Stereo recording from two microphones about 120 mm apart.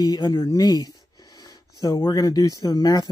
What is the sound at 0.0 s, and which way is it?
Speech, 35° left (ahead or behind).